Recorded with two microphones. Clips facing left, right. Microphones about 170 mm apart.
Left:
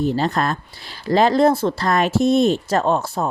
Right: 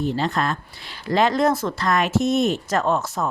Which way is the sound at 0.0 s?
40° left (ahead or behind).